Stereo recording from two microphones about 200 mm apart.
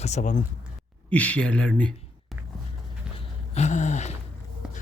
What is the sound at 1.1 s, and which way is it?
Speech, 5° left (ahead or behind).